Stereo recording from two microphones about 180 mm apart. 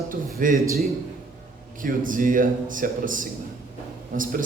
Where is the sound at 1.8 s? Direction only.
50° right (ahead or behind).